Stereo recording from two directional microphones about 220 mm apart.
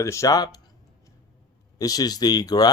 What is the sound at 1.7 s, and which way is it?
Speech, 15° left (ahead or behind).